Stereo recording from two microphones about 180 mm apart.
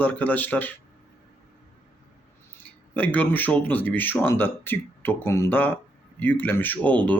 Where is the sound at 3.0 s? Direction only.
10° left (ahead or behind).